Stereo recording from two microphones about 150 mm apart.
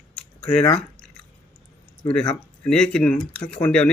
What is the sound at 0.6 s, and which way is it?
Drip, 10° left (ahead or behind).